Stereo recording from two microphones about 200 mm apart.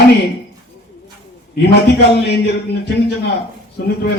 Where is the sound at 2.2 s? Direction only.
55° left (ahead or behind).